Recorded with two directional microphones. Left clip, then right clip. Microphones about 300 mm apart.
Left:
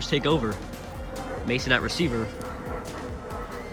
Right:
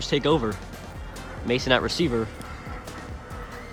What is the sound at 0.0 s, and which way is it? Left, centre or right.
Speech, centre.